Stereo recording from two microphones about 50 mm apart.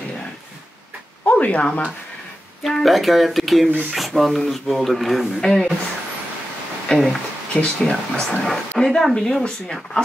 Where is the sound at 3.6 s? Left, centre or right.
Right.